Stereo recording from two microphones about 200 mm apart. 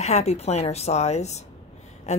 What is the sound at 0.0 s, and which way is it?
A woman's voice, 35° left (ahead or behind).